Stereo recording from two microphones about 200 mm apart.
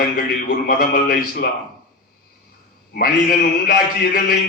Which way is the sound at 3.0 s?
50° left (ahead or behind).